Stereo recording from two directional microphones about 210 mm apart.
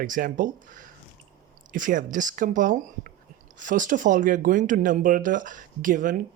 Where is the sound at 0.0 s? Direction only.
40° right (ahead or behind).